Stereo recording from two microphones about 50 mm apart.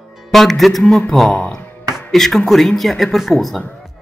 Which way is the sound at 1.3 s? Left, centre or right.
Centre.